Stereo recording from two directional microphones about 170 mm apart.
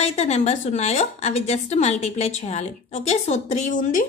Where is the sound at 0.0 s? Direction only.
40° left (ahead or behind).